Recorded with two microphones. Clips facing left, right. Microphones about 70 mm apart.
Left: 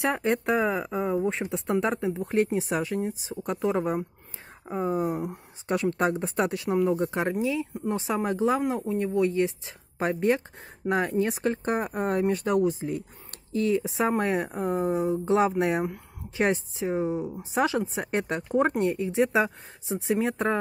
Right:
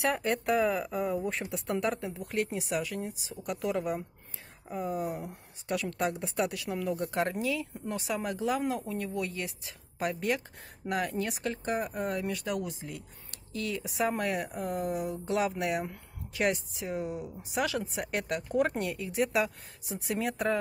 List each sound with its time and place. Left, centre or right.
0.0 s speech: left
7.1 s speech: centre
7.9 s speech: left
13.5 s speech: left